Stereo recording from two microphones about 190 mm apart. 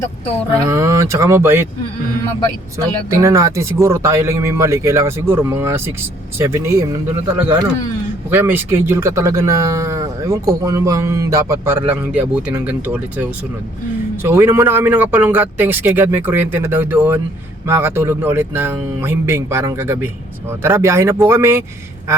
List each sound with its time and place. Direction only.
0.6 s speech: 15° right (ahead or behind)
2.7 s speech: 15° right (ahead or behind)